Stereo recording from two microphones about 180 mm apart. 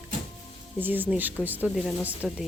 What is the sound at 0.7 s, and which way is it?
A woman's voice, 10° right (ahead or behind).